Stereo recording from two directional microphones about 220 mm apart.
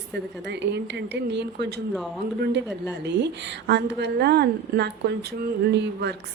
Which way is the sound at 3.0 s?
50° right (ahead or behind).